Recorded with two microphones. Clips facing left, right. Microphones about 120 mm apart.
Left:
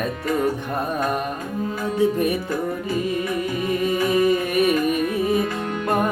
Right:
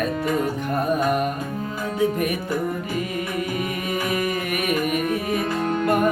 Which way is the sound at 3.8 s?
30° left (ahead or behind).